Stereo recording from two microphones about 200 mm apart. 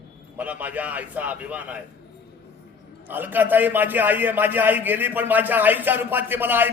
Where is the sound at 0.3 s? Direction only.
10° right (ahead or behind).